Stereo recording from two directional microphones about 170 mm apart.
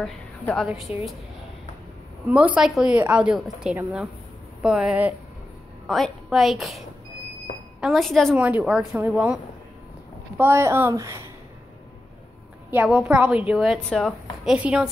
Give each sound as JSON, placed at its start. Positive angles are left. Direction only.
{"t": 0.0, "sound": "a woman's voice", "side_deg": 5}
{"t": 2.2, "sound": "a woman's voice", "side_deg": -5}
{"t": 7.8, "sound": "a woman's voice", "side_deg": 0}
{"t": 8.4, "sound": "a woman's voice", "side_deg": -10}
{"t": 12.7, "sound": "a woman's voice", "side_deg": -5}